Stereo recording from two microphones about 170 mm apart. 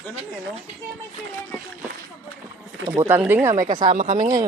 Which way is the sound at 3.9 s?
50° right (ahead or behind).